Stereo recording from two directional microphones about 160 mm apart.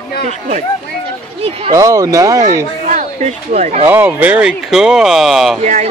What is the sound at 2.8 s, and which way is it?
Speech, 45° right (ahead or behind).